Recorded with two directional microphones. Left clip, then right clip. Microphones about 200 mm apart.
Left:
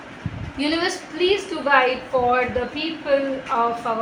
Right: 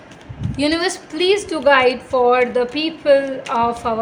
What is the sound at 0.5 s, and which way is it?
A woman's voice, 55° right (ahead or behind).